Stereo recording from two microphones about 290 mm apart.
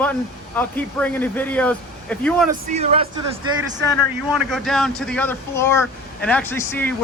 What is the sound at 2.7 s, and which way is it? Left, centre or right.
Speech, right.